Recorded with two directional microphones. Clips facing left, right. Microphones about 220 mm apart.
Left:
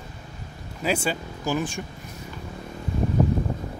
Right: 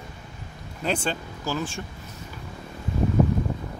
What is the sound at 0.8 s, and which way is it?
Speech, 10° left (ahead or behind).